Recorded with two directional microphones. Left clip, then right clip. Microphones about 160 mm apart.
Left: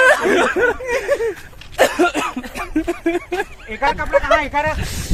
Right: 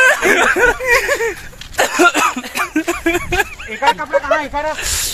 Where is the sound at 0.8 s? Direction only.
20° left (ahead or behind).